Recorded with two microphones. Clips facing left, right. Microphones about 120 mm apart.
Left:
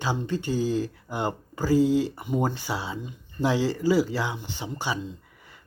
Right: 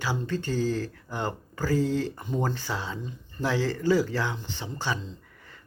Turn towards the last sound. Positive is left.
turn(degrees=10)  # may be behind; listen again after turning